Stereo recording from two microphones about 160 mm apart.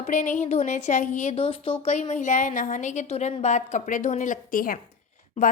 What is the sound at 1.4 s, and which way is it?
A woman's voice, 35° left (ahead or behind).